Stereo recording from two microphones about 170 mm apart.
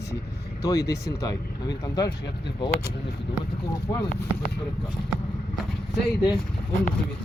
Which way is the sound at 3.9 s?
20° left (ahead or behind).